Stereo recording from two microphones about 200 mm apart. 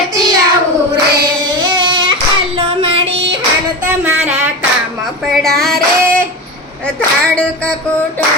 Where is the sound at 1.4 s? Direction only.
20° right (ahead or behind).